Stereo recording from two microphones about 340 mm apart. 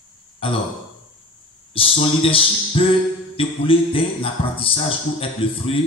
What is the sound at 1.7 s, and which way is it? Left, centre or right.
Music, centre.